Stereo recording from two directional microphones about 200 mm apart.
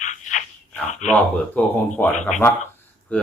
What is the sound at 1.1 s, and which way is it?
Speech, 5° left (ahead or behind).